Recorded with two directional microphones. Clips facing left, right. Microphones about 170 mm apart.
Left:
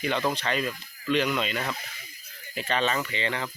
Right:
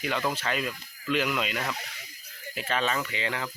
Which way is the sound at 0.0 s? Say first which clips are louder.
Left 2 dB; 5° right (ahead or behind).